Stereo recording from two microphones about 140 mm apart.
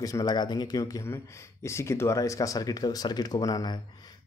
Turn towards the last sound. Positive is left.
turn(degrees=30)  # may be behind; listen again after turning